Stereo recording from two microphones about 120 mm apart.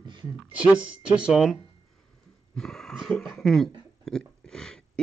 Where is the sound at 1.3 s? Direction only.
Centre (ahead or behind).